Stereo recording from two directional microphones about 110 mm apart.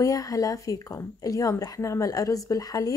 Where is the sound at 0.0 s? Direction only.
35° left (ahead or behind).